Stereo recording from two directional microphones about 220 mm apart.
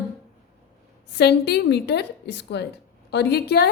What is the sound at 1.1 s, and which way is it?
A woman's voice, 50° left (ahead or behind).